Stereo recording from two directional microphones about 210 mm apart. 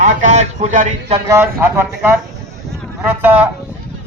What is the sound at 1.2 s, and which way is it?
A man's voice, 10° right (ahead or behind).